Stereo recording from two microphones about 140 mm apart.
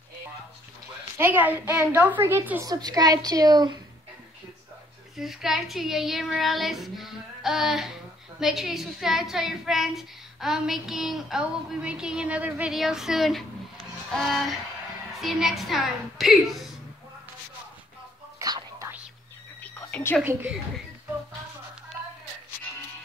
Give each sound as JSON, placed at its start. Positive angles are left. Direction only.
{"t": 1.1, "sound": "a child's voice", "side_deg": -15}
{"t": 2.6, "sound": "a woman's voice", "side_deg": -25}
{"t": 5.1, "sound": "speech", "side_deg": 0}
{"t": 18.4, "sound": "whispering", "side_deg": -25}
{"t": 19.6, "sound": "whispering", "side_deg": 15}